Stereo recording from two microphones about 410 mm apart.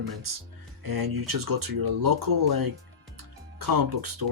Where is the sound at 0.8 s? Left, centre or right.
Right.